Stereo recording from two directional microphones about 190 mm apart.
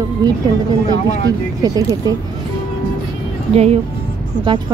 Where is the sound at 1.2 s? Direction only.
20° right (ahead or behind).